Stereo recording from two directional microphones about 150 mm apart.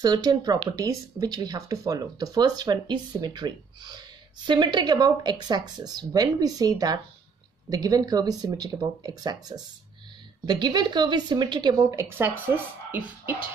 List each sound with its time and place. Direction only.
0.0 s speech: 25° right (ahead or behind)